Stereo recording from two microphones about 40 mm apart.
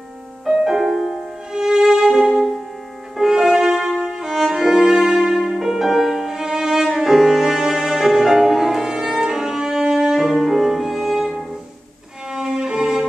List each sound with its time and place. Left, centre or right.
0.7 s music: centre
12.3 s violin: centre